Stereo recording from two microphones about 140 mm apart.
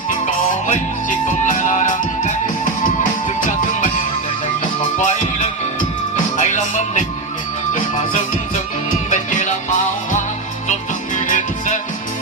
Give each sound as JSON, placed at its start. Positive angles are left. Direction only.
{"t": 1.5, "sound": "music", "side_deg": 60}
{"t": 3.7, "sound": "music", "side_deg": 65}
{"t": 4.9, "sound": "music", "side_deg": 60}
{"t": 9.0, "sound": "music", "side_deg": 60}